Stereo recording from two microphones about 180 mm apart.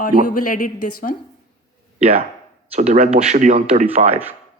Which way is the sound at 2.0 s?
35° right (ahead or behind).